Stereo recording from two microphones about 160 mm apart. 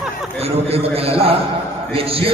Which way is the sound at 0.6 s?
40° right (ahead or behind).